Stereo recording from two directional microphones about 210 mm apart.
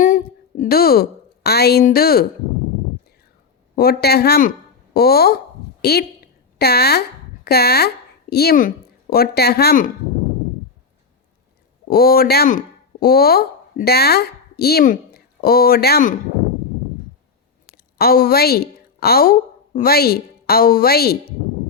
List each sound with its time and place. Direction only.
0.0 s a sound: 40° left (ahead or behind)
1.5 s speech: 50° left (ahead or behind)
3.8 s a woman's voice: 50° left (ahead or behind)
11.9 s speech: 45° left (ahead or behind)
17.9 s a woman's voice: 45° left (ahead or behind)